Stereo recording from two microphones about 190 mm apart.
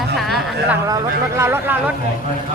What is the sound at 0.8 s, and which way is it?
A man's voice, 15° right (ahead or behind).